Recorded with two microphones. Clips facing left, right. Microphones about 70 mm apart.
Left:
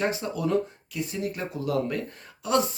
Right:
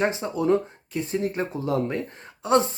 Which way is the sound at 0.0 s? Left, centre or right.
Right.